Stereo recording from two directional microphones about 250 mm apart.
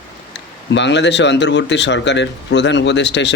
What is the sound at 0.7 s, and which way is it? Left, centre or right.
Speech, left.